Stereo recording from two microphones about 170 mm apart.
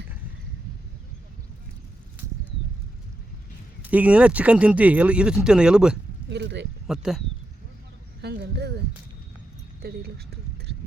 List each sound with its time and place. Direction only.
3.8 s speech: 10° right (ahead or behind)
6.3 s speech: 90° right
6.8 s speech: 5° right (ahead or behind)
8.2 s speech: 80° right
9.8 s speech: 65° right (ahead or behind)